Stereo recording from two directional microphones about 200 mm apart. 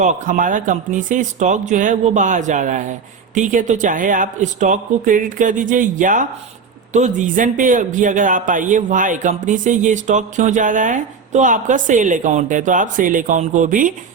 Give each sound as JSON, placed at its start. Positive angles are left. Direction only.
{"t": 0.0, "sound": "speech", "side_deg": -40}